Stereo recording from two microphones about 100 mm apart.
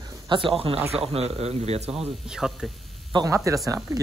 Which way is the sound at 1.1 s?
90° right.